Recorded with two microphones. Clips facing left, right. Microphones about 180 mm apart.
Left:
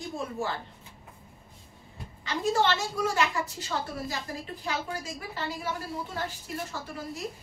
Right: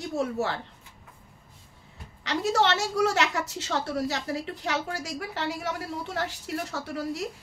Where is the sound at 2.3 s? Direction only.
75° right (ahead or behind).